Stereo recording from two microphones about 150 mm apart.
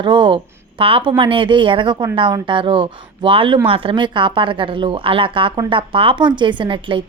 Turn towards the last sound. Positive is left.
turn(degrees=-35)  # may be behind; listen again after turning